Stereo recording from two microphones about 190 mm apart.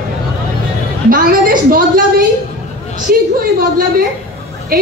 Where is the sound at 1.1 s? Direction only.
50° right (ahead or behind).